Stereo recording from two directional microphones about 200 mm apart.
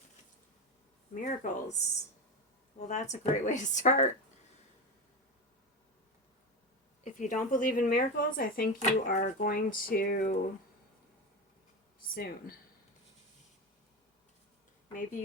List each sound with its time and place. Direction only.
1.2 s speech: 40° left (ahead or behind)
2.8 s speech: 35° left (ahead or behind)
7.0 s speech: 40° left (ahead or behind)
12.1 s speech: 50° left (ahead or behind)